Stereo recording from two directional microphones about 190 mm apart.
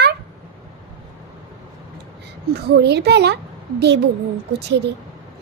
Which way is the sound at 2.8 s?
60° right (ahead or behind).